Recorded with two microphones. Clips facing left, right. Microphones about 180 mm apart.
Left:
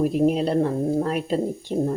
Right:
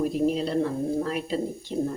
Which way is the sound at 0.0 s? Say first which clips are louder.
Left 4 dB; 55° left (ahead or behind).